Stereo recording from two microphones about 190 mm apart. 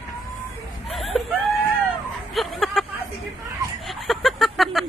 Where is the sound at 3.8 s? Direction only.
Centre (ahead or behind).